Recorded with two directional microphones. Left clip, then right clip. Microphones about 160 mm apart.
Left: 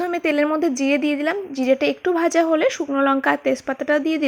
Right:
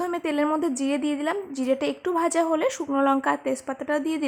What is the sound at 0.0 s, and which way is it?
A woman's voice, 10° left (ahead or behind).